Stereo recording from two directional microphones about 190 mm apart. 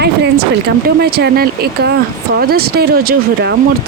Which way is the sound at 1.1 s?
55° right (ahead or behind).